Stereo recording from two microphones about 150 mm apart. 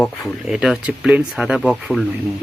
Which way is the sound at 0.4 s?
5° right (ahead or behind).